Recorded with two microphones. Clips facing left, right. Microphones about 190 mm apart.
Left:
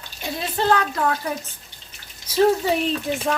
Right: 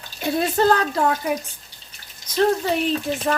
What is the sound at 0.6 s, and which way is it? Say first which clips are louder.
Speech: right 1 dB; 40° right (ahead or behind).